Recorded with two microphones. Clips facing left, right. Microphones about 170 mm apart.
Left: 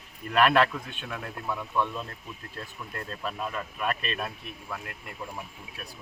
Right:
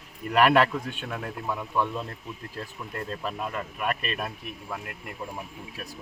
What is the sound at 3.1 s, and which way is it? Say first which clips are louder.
Speech: even; 10° right (ahead or behind).